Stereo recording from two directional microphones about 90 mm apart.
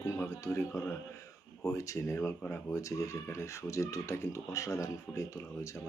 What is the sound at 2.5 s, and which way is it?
Speech, 20° left (ahead or behind).